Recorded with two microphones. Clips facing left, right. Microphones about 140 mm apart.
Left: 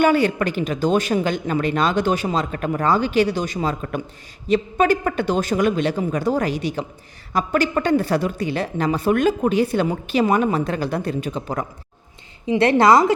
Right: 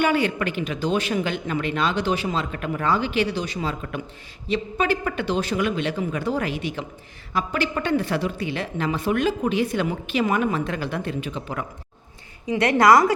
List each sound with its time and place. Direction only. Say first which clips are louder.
0.0 s a woman's voice: left 4 dB; 40° left (ahead or behind)
12.5 s a woman's voice: left 2 dB; 30° left (ahead or behind)